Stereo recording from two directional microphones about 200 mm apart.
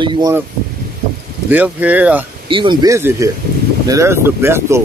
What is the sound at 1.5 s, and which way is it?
Speech, 5° right (ahead or behind).